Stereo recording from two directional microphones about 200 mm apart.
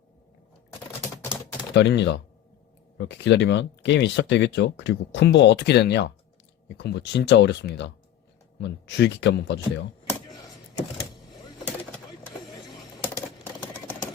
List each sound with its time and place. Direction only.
1.7 s speech: 60° left (ahead or behind)